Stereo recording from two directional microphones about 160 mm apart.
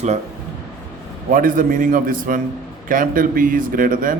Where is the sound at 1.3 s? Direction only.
60° right (ahead or behind).